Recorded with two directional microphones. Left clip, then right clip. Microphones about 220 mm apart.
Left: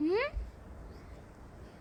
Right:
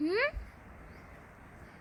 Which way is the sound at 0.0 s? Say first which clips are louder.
Right 1 dB; 10° left (ahead or behind).